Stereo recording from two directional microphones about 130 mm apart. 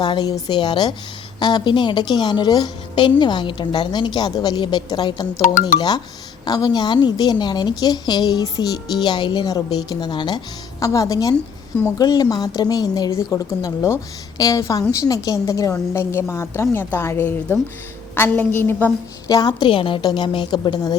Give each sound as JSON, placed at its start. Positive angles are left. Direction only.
{"t": 0.0, "sound": "a woman's voice", "side_deg": 35}
{"t": 6.4, "sound": "a woman's voice", "side_deg": 30}
{"t": 19.3, "sound": "a woman's voice", "side_deg": 30}